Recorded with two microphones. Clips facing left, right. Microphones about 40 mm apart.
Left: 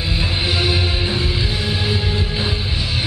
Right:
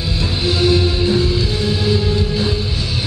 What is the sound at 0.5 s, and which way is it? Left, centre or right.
Music, centre.